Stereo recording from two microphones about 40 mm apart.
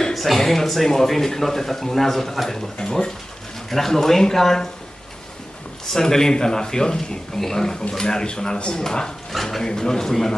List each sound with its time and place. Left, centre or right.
0.1 s speech: centre
2.5 s speech: centre
5.9 s speech: centre
9.3 s speech: centre
9.6 s speech: centre